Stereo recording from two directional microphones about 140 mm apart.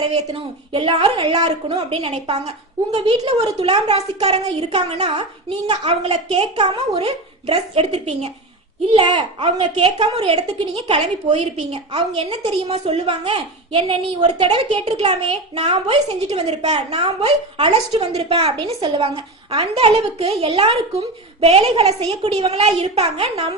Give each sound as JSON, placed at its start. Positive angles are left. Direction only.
{"t": 0.0, "sound": "a woman's voice", "side_deg": -40}